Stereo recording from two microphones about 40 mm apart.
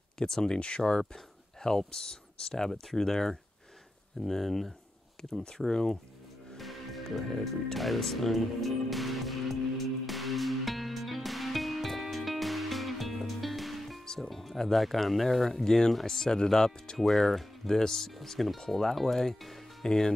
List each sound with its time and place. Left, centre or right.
0.2 s speech: centre
5.3 s speech: centre
6.5 s music: centre
7.7 s speech: centre
10.0 s music: centre
14.0 s music: centre
14.3 s speech: centre
15.4 s speech: centre
17.0 s speech: centre